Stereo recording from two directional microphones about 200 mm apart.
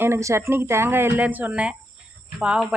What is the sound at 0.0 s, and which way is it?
Speech, 15° right (ahead or behind).